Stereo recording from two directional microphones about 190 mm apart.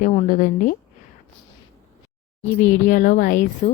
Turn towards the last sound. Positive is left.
turn(degrees=45)  # may be behind; listen again after turning